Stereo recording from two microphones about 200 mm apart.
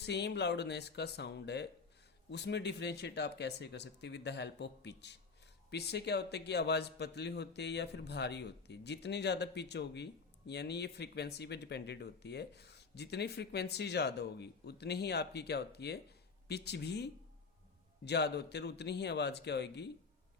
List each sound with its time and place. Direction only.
0.0 s a man's voice: 55° left (ahead or behind)